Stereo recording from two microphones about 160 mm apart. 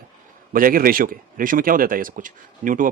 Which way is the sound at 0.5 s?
60° right (ahead or behind).